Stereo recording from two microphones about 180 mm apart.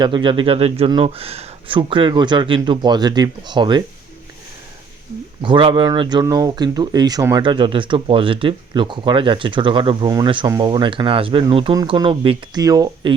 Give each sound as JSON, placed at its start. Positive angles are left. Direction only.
{"t": 0.0, "sound": "speech", "side_deg": -25}
{"t": 5.4, "sound": "speech", "side_deg": -25}